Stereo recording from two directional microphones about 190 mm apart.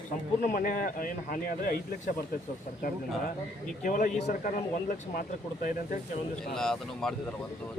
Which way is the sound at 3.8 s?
45° left (ahead or behind).